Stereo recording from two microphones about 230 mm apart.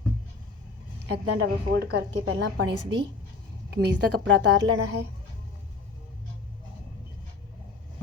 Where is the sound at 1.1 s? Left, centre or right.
Right.